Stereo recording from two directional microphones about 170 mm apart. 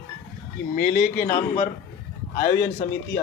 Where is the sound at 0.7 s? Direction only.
60° left (ahead or behind).